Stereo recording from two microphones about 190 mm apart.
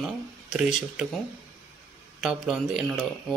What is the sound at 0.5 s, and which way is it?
Speech, 5° right (ahead or behind).